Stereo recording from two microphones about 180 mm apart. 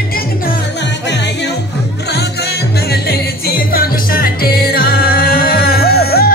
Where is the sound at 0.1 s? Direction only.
55° left (ahead or behind).